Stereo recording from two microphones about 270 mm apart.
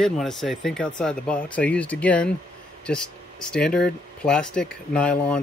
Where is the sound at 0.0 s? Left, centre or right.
Centre.